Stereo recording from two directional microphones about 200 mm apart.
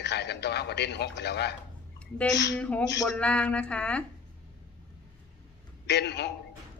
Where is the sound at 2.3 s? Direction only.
60° left (ahead or behind).